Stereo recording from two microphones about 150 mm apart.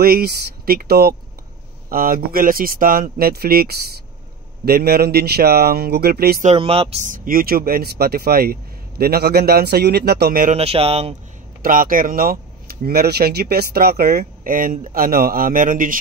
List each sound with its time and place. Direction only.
0.0 s speech: 90° right
1.9 s speech: 75° right (ahead or behind); by 6.4 s 90° right
6.4 s speech: 40° right (ahead or behind)
7.1 s speech: 75° right (ahead or behind)
10.5 s speech: 40° right (ahead or behind)
11.6 s speech: 70° right (ahead or behind)